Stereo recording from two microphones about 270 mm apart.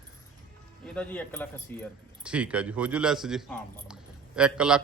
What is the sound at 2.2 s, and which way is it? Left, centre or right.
A man's voice, centre.